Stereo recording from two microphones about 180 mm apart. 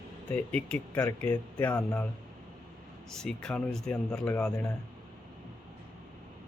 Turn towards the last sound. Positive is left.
turn(degrees=5)  # may be behind; listen again after turning